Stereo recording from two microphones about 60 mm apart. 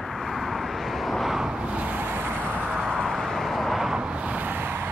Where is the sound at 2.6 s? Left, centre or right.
Centre; by 4.9 s right.